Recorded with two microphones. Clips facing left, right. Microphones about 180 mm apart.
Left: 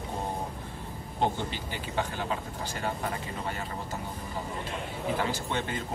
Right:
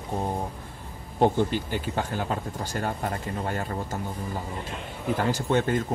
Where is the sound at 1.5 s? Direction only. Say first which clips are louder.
Right 5 dB; 50° right (ahead or behind).